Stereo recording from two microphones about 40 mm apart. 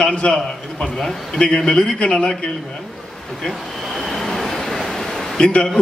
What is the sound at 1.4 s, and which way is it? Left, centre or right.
A man's voice, left.